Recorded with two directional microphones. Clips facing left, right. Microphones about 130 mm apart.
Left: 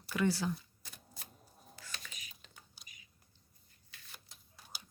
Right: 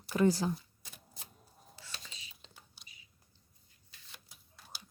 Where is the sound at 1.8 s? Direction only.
25° right (ahead or behind).